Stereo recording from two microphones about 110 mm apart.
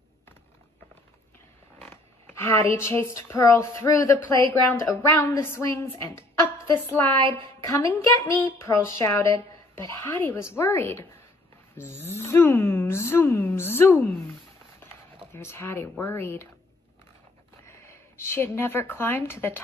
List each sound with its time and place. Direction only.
1.9 s a woman's voice: 20° left (ahead or behind)
14.8 s a sound: 20° left (ahead or behind)
15.3 s a woman's voice: 25° left (ahead or behind)
17.8 s speech: 20° left (ahead or behind)